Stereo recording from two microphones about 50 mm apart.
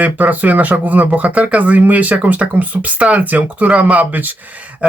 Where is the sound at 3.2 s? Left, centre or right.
Right.